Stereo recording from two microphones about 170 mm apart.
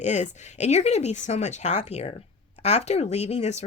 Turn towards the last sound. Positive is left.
turn(degrees=40)  # may be behind; listen again after turning